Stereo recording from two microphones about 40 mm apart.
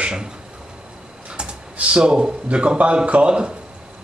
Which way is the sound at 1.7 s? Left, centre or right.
Right.